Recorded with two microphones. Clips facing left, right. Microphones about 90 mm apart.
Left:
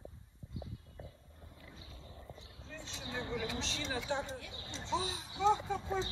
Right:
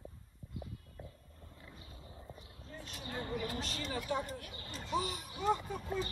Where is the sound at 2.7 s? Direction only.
25° left (ahead or behind).